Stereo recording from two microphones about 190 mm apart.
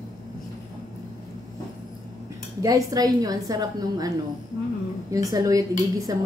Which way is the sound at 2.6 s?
20° right (ahead or behind).